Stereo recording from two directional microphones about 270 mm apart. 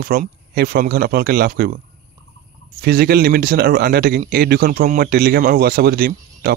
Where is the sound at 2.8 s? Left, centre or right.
Right.